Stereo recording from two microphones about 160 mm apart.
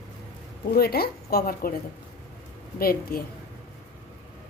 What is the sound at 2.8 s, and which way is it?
Speech, 70° left (ahead or behind).